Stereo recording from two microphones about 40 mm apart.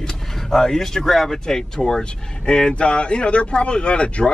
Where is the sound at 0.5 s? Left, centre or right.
Centre.